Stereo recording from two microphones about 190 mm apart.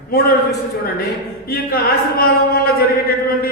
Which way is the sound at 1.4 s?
50° left (ahead or behind).